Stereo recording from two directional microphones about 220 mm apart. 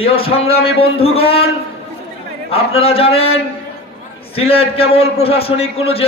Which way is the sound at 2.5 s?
25° left (ahead or behind).